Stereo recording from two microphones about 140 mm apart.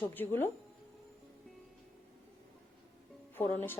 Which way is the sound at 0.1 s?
15° left (ahead or behind).